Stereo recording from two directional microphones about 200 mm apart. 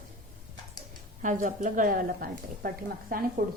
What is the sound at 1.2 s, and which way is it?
A woman's voice, 40° right (ahead or behind).